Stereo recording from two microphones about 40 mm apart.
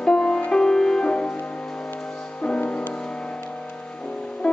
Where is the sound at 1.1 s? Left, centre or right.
Left.